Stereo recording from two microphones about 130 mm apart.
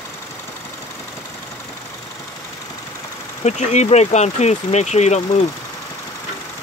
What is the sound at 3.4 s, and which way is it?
Speech, 60° left (ahead or behind).